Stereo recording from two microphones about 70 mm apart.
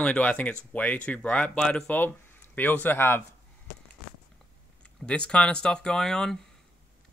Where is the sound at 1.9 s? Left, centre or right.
Left.